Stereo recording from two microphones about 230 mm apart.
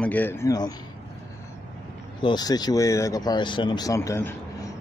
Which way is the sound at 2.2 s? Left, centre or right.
Centre.